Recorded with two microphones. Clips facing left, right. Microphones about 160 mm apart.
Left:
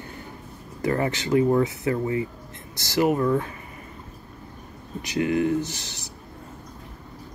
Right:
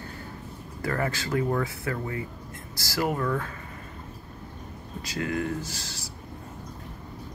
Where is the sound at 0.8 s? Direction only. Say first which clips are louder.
Left 5 dB; 20° left (ahead or behind).